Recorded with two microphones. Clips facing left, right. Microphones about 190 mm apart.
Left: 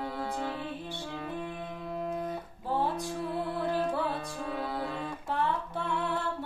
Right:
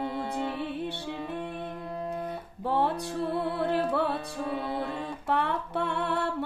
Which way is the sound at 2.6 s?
65° right (ahead or behind).